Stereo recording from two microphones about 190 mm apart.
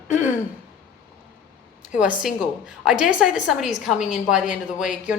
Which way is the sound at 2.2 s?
5° right (ahead or behind).